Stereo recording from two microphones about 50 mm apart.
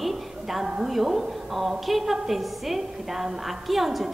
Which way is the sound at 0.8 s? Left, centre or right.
Centre.